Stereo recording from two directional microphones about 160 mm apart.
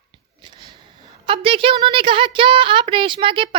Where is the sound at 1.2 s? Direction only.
35° right (ahead or behind).